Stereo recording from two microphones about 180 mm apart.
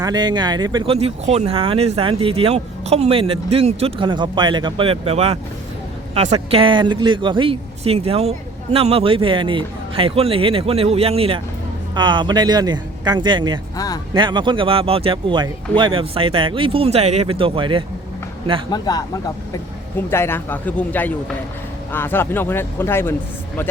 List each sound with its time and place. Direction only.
0.0 s speech: 20° right (ahead or behind)
0.9 s speech: 35° right (ahead or behind)
13.7 s speech: 20° left (ahead or behind)
14.1 s speech: 25° right (ahead or behind)
18.7 s speech: 20° left (ahead or behind)
20.1 s speech: 15° left (ahead or behind)